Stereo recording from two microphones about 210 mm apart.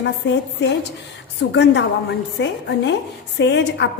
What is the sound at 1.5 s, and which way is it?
A woman's voice, 55° left (ahead or behind).